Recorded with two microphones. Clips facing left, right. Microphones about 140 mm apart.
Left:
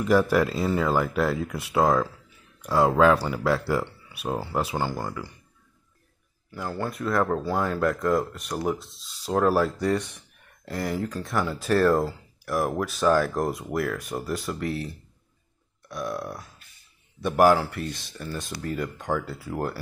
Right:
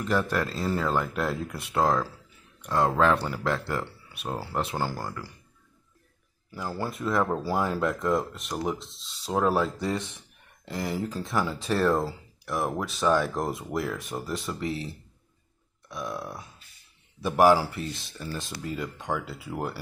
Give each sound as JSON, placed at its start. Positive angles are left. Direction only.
{"t": 0.0, "sound": "speech", "side_deg": 10}
{"t": 6.5, "sound": "speech", "side_deg": -5}